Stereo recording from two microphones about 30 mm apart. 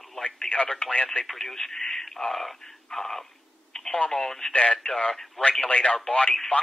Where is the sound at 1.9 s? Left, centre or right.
Centre.